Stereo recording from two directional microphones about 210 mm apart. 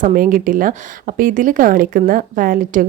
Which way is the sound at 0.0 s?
40° right (ahead or behind).